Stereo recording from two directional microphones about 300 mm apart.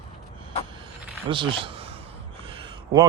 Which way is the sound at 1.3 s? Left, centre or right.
Centre.